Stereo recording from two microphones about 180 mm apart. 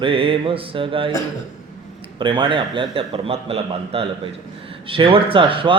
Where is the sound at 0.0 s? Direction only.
30° right (ahead or behind).